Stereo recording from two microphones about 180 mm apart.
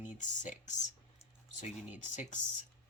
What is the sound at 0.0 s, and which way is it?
Speech, 45° left (ahead or behind).